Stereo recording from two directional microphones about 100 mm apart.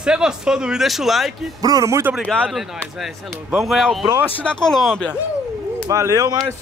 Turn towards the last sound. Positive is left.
turn(degrees=-35)  # may be behind; listen again after turning